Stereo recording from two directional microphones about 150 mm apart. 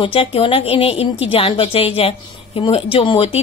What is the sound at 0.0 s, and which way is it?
A woman's voice, 35° left (ahead or behind).